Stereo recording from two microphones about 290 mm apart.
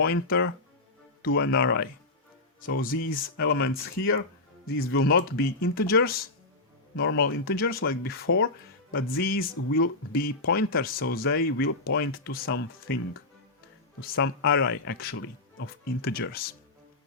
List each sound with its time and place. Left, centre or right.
0.0 s speech: left